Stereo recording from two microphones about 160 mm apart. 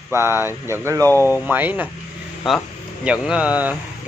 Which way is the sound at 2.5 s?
Centre (ahead or behind).